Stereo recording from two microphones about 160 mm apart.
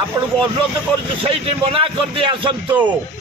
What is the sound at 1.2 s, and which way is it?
A man's voice, 35° right (ahead or behind).